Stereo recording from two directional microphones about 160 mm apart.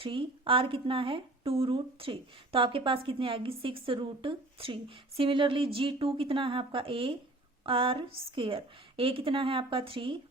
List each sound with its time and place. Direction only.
0.0 s a woman's voice: 35° right (ahead or behind)